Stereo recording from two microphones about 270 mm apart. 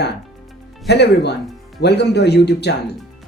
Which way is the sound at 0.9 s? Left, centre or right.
Left.